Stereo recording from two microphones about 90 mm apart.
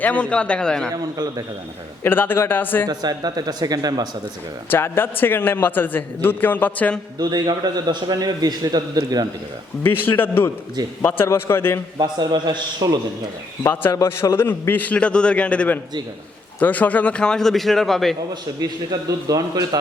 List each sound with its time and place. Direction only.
0.0 s a man's voice: 15° left (ahead or behind)
0.9 s a man's voice: 50° right (ahead or behind)
2.0 s a man's voice: 25° left (ahead or behind)
2.8 s a man's voice: 50° right (ahead or behind)
4.7 s a man's voice: 25° left (ahead or behind)
7.2 s a man's voice: 50° right (ahead or behind)
9.8 s a man's voice: 20° left (ahead or behind)
11.9 s a man's voice: 55° right (ahead or behind)
13.9 s a man's voice: 35° left (ahead or behind); by 18.2 s centre (ahead or behind)
18.6 s a man's voice: 45° right (ahead or behind)